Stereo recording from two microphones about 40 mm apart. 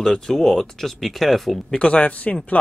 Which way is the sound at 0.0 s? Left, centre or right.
Centre.